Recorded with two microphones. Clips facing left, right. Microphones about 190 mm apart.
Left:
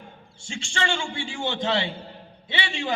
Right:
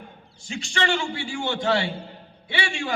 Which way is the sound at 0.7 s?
30° left (ahead or behind).